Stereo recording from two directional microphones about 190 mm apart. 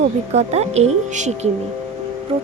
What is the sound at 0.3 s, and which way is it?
A woman's voice, 35° right (ahead or behind).